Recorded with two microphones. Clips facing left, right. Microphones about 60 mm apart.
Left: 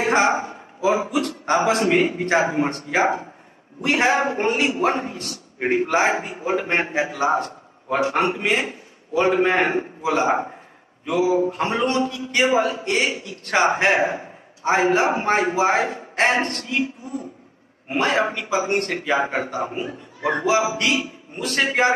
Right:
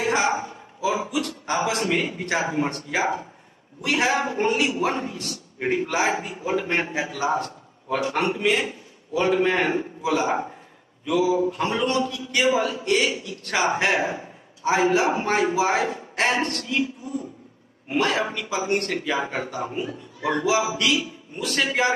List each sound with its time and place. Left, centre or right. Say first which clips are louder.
0.0 s a man's voice: left 4 dB; left